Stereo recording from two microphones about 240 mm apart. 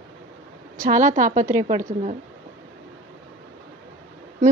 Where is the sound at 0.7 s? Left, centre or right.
Right.